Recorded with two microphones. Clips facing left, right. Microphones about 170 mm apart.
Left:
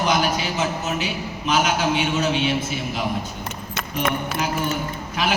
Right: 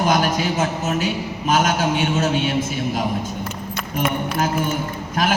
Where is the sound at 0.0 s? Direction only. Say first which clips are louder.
Right 2 dB; 45° right (ahead or behind).